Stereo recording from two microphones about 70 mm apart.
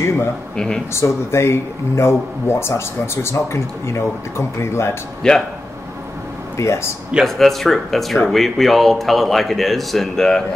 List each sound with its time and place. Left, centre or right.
0.6 s speech: centre
0.9 s speech: left
5.2 s speech: centre
6.6 s speech: left
7.2 s a man's voice: centre